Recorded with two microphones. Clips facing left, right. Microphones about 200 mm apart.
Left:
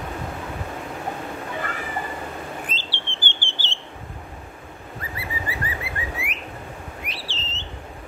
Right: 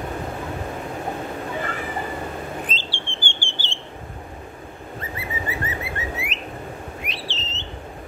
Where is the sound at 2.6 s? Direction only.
15° right (ahead or behind).